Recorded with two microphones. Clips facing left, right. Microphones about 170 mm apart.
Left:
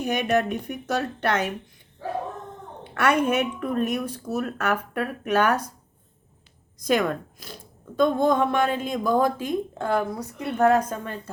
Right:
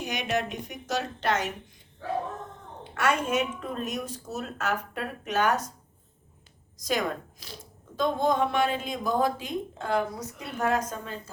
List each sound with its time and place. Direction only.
0.0 s speech: 55° left (ahead or behind)
2.9 s speech: 60° left (ahead or behind)
6.7 s speech: 60° left (ahead or behind)
10.3 s a woman's voice: centre (ahead or behind)
10.6 s speech: 55° left (ahead or behind)